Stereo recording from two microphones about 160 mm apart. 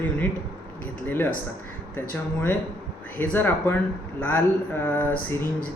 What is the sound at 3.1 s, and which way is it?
Speech, 10° left (ahead or behind).